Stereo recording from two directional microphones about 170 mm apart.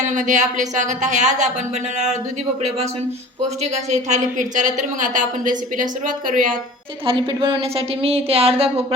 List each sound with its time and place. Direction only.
0.1 s a woman's voice: 45° right (ahead or behind)
3.6 s a woman's voice: 45° right (ahead or behind)
7.0 s speech: 30° right (ahead or behind)